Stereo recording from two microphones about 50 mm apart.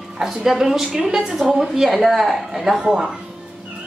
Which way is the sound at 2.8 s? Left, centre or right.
Centre.